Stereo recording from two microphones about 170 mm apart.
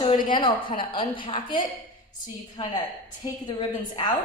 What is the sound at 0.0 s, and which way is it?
A woman's voice, 30° left (ahead or behind).